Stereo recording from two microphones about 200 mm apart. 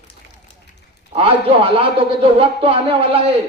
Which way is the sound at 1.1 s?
30° right (ahead or behind).